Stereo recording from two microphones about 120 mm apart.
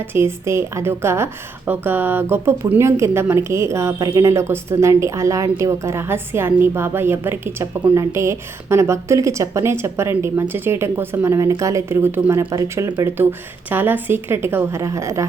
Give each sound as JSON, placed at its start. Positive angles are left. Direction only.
{"t": 0.0, "sound": "a woman's voice", "side_deg": -20}